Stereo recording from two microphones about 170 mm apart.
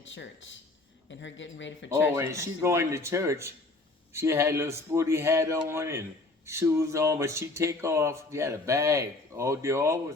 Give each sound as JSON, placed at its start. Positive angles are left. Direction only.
{"t": 0.1, "sound": "speech", "side_deg": 90}
{"t": 2.1, "sound": "a man's voice", "side_deg": -15}